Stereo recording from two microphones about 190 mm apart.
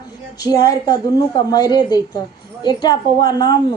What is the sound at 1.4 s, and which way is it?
A woman's voice, 20° left (ahead or behind).